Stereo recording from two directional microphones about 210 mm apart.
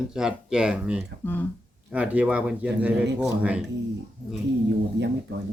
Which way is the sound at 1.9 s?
5° right (ahead or behind).